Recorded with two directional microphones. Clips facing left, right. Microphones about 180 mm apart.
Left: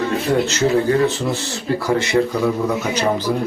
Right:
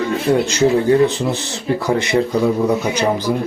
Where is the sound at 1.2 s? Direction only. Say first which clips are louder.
Right 1 dB; 20° right (ahead or behind).